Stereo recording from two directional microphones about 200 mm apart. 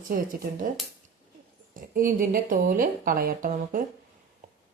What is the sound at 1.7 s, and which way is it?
A woman's voice, 45° right (ahead or behind).